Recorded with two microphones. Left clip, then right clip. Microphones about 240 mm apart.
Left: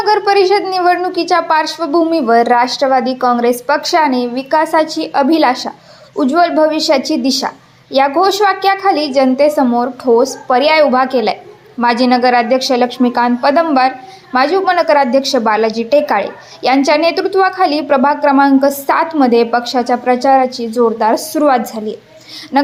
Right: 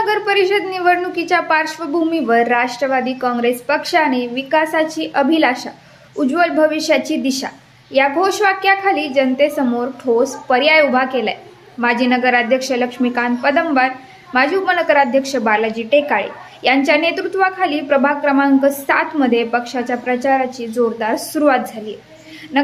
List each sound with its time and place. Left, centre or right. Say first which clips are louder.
0.0 s a woman's voice: left 5 dB; centre